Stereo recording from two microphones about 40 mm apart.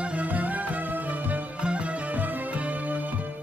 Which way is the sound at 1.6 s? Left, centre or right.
Right.